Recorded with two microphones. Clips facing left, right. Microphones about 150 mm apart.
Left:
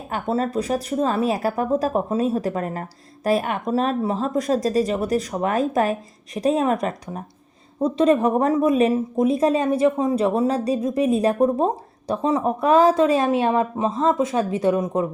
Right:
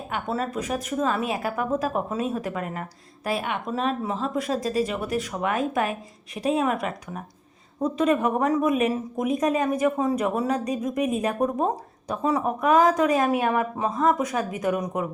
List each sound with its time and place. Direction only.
0.1 s a woman's voice: 35° left (ahead or behind)